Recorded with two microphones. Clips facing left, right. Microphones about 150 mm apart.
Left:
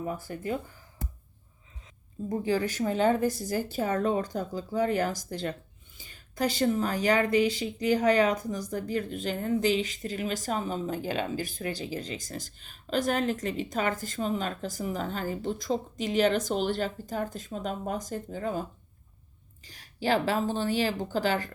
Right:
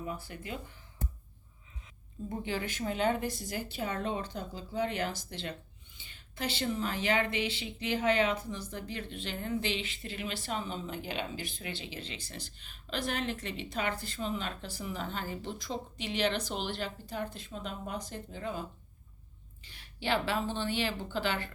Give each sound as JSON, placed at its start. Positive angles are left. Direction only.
{"t": 0.0, "sound": "speech", "side_deg": 45}
{"t": 2.3, "sound": "a woman's voice", "side_deg": 40}
{"t": 19.6, "sound": "a woman's voice", "side_deg": 40}